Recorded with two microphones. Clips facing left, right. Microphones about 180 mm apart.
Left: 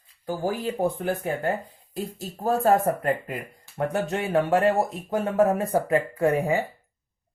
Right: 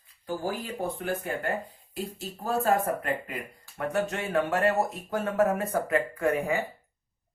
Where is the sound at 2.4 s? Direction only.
40° left (ahead or behind).